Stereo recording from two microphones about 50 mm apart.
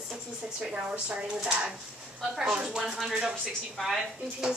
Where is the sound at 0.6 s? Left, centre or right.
Right.